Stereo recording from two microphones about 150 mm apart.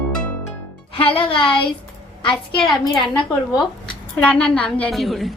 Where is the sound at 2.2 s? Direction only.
30° left (ahead or behind).